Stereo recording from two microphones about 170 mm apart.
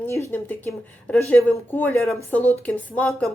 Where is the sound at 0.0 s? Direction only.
15° left (ahead or behind).